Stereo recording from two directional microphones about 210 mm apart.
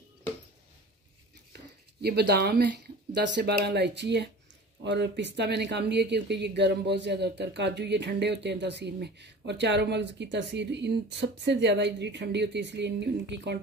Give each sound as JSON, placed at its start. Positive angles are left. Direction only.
{"t": 1.5, "sound": "speech", "side_deg": -50}